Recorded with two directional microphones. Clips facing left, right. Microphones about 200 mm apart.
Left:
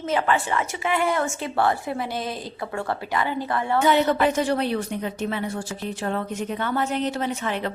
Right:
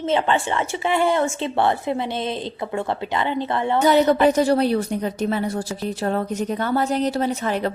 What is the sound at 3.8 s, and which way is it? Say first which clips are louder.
A woman's voice: right 4 dB; 40° right (ahead or behind).